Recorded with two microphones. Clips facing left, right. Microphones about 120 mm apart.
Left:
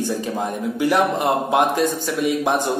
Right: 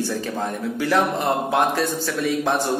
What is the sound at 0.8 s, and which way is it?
Speech, 15° left (ahead or behind).